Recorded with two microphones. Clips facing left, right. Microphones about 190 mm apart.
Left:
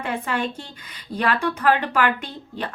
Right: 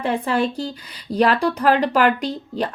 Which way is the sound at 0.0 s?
35° right (ahead or behind).